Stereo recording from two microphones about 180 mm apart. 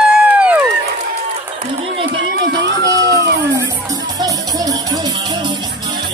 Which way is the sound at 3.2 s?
70° right (ahead or behind).